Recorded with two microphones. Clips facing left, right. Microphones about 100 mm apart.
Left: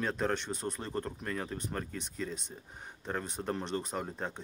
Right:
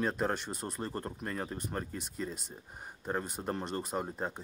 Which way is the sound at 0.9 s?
25° right (ahead or behind).